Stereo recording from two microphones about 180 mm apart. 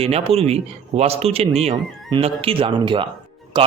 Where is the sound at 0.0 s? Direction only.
35° right (ahead or behind).